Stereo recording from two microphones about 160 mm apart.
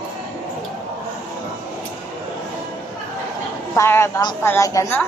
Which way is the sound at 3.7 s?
15° left (ahead or behind).